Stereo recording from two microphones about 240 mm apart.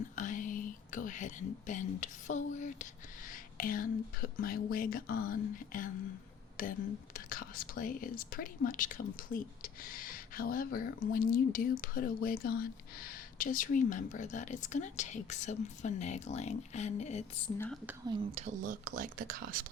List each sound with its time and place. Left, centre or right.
0.2 s speech: left
18.1 s speech: right